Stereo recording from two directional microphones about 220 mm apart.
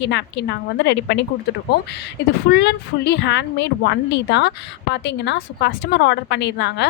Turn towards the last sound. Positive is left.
turn(degrees=50)  # may be behind; listen again after turning